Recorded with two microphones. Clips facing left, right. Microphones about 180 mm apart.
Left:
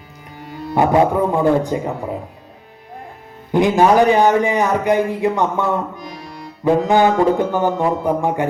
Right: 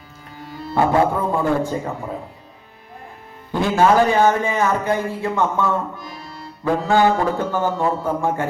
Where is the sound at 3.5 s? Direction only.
15° left (ahead or behind).